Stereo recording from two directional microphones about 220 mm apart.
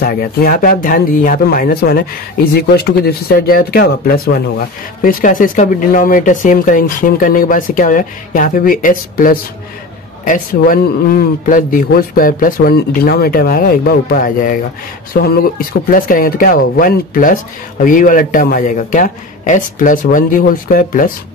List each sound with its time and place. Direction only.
0.0 s speech: 45° left (ahead or behind)